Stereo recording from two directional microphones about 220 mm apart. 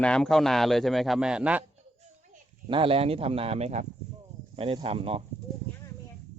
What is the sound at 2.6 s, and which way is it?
Speech, 25° right (ahead or behind).